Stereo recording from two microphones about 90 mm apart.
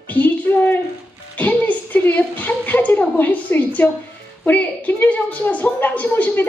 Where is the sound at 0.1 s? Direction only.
20° left (ahead or behind).